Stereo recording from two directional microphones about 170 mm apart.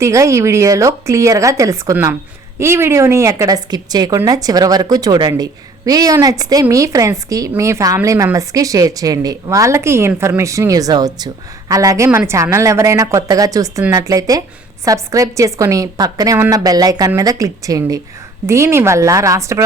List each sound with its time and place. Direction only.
0.0 s a woman's voice: 15° right (ahead or behind)